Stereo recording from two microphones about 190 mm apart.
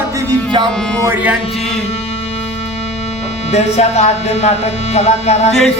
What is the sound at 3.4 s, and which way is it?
Speech, 35° left (ahead or behind).